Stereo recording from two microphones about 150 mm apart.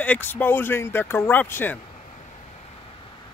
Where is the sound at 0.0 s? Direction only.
10° left (ahead or behind).